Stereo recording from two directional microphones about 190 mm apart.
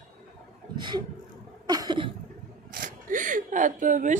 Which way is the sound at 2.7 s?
45° right (ahead or behind).